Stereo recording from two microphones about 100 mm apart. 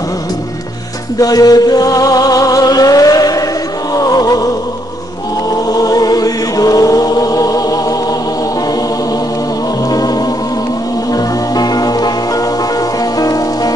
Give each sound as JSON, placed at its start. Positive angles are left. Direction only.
{"t": 1.2, "sound": "music", "side_deg": 40}
{"t": 5.7, "sound": "chant", "side_deg": 40}
{"t": 9.8, "sound": "music", "side_deg": 40}
{"t": 13.2, "sound": "music", "side_deg": 35}